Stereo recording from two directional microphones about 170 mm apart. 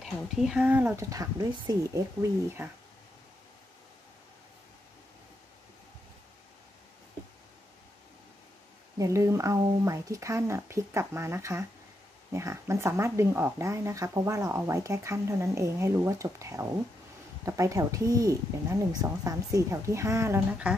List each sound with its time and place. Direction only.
0.0 s speech: 5° right (ahead or behind)
8.9 s speech: 20° right (ahead or behind)